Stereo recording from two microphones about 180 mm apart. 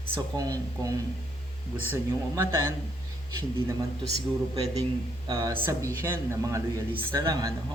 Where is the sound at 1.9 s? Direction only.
15° right (ahead or behind).